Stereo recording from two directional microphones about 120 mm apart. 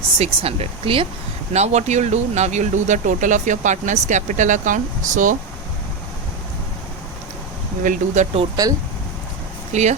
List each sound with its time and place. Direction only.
0.2 s speech: 55° right (ahead or behind)
1.5 s speech: 70° right (ahead or behind); by 5.4 s 90° right
7.9 s speech: 90° right
8.6 s speech: 30° right (ahead or behind)
9.7 s speech: 75° right (ahead or behind)